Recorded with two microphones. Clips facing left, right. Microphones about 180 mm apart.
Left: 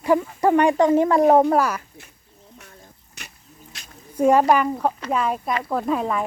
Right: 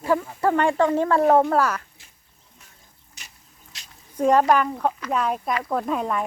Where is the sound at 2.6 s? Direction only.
60° left (ahead or behind).